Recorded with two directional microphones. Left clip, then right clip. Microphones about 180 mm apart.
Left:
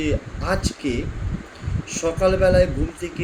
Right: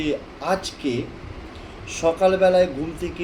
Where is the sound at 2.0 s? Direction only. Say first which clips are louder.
Right 1 dB; 10° left (ahead or behind).